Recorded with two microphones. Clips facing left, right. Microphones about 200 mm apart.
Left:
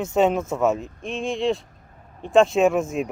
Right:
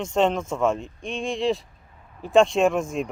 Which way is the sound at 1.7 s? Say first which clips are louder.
Left 3 dB; 45° left (ahead or behind).